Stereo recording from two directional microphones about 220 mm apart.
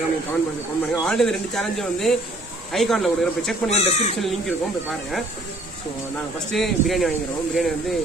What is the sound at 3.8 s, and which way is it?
Speech, 30° left (ahead or behind).